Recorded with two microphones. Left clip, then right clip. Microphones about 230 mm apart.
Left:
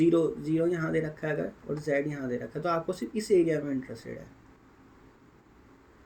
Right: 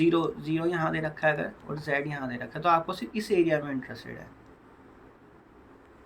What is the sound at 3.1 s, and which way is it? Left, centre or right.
Speech, right.